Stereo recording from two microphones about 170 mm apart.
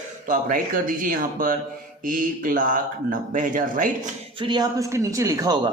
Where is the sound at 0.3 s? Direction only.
50° right (ahead or behind).